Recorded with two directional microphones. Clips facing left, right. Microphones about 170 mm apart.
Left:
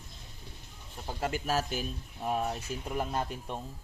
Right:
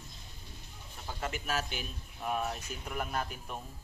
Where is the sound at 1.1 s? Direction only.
30° left (ahead or behind).